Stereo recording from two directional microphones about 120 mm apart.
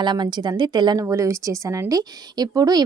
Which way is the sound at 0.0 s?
40° right (ahead or behind).